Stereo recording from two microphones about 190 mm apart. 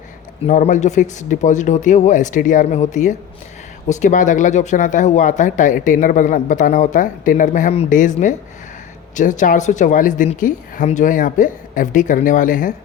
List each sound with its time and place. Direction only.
0.4 s a woman's voice: 40° left (ahead or behind)